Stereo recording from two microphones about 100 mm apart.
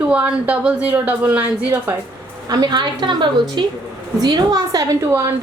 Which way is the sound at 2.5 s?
45° right (ahead or behind).